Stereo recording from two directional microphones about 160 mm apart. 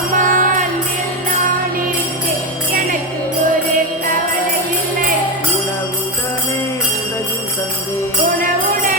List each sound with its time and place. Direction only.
0.2 s music: 55° right (ahead or behind)